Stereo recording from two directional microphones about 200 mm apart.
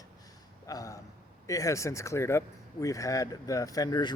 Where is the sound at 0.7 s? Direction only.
15° left (ahead or behind).